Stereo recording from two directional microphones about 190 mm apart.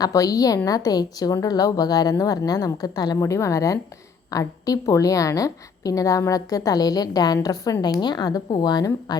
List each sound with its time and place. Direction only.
0.0 s a woman's voice: 20° left (ahead or behind)